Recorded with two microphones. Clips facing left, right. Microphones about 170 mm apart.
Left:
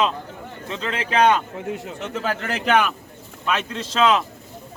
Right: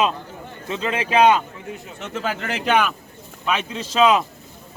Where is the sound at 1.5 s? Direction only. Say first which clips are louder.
Left 6 dB; 85° left.